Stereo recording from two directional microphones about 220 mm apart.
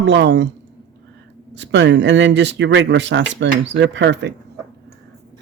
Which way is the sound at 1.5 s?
55° right (ahead or behind).